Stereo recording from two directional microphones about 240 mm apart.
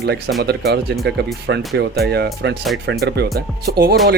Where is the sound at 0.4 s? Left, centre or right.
Right.